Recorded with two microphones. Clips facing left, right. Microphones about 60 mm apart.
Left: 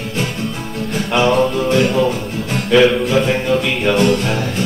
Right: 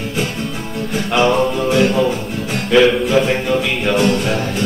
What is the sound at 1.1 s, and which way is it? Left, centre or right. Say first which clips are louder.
Music: even; centre.